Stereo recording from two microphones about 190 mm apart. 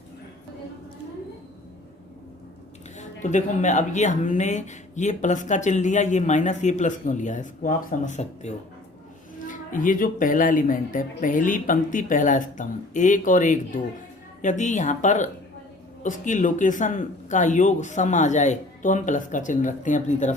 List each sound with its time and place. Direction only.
3.0 s speech: 40° left (ahead or behind)